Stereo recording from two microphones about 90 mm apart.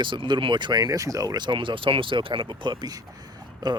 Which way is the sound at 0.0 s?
60° right (ahead or behind).